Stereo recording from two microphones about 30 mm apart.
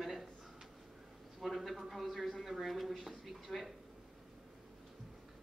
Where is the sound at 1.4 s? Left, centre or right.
Centre.